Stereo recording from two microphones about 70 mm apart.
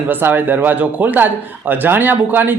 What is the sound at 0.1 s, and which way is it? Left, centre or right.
A man's voice, right.